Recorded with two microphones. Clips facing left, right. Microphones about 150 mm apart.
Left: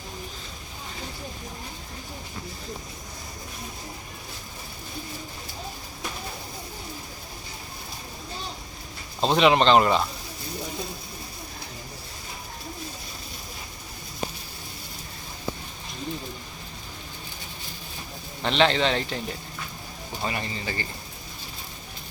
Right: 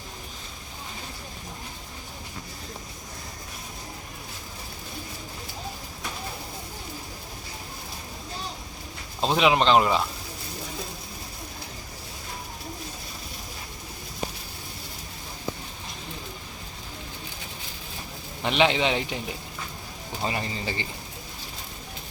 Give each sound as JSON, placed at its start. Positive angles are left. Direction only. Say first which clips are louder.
{"t": 9.2, "sound": "speech", "louder": "left 2 dB", "side_deg": -5}
{"t": 18.4, "sound": "speech", "louder": "left 1 dB", "side_deg": -10}
{"t": 20.2, "sound": "speech", "louder": "right 1 dB", "side_deg": -25}